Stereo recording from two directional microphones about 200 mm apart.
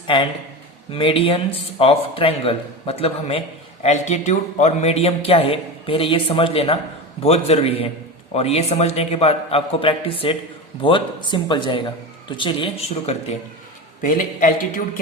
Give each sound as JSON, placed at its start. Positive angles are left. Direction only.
{"t": 0.1, "sound": "a man's voice", "side_deg": 25}
{"t": 14.0, "sound": "a man's voice", "side_deg": 45}